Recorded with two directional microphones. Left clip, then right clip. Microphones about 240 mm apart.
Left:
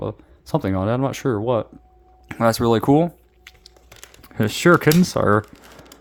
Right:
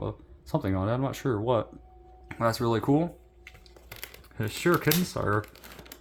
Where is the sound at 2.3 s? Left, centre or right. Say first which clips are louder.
Left 9 dB; left.